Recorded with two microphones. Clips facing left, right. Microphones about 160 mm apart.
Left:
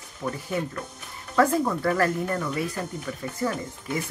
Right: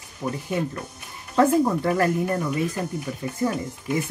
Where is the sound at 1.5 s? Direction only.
20° right (ahead or behind).